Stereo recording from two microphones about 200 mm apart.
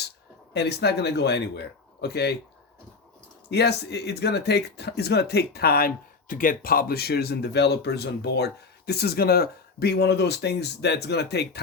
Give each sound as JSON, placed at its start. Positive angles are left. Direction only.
{"t": 0.5, "sound": "speech", "side_deg": 55}
{"t": 3.5, "sound": "speech", "side_deg": 55}